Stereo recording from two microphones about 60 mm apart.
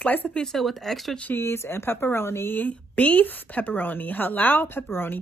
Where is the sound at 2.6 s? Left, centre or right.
Left.